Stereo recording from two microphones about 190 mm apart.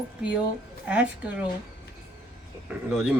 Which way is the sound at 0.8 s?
5° right (ahead or behind).